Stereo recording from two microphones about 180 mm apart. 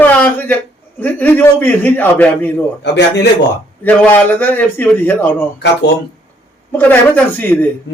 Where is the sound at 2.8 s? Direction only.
70° left (ahead or behind).